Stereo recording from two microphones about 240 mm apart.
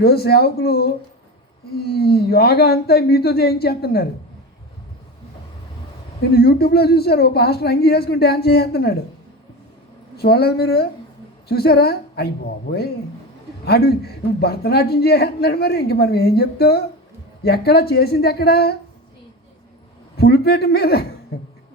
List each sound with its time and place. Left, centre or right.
0.0 s a man's voice: left
6.3 s a man's voice: left
10.2 s a man's voice: left
13.7 s a man's voice: left
20.1 s a man's voice: left
21.3 s beatboxing: left